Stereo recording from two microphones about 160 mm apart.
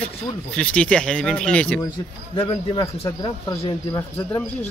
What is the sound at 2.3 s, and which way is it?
Speech, 30° left (ahead or behind).